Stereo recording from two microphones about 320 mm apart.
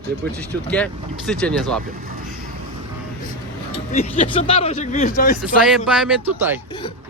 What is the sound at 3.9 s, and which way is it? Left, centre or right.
Speech, centre.